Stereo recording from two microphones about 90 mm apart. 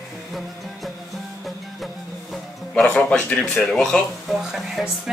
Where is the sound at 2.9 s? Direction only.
15° left (ahead or behind).